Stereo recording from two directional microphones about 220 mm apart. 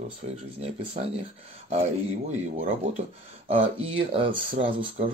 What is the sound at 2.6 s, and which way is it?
Speech, 30° right (ahead or behind).